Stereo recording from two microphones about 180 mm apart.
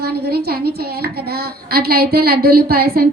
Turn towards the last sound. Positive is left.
turn(degrees=-55)  # may be behind; listen again after turning